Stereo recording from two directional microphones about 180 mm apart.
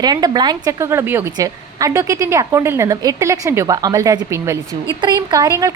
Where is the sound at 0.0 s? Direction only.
20° right (ahead or behind).